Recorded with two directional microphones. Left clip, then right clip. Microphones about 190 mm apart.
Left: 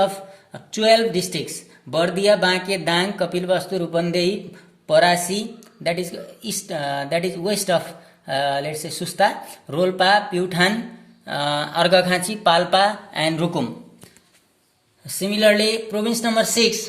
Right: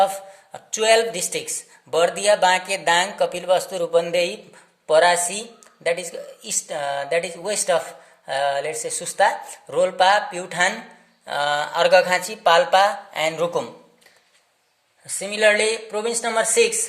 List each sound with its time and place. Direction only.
0.0 s speech: 35° right (ahead or behind); by 13.5 s 20° right (ahead or behind)
15.1 s speech: 35° right (ahead or behind)